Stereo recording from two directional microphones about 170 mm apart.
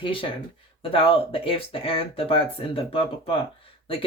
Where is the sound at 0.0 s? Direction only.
30° left (ahead or behind).